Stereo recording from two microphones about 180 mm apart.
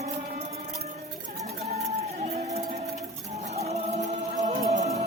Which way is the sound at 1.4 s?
35° right (ahead or behind).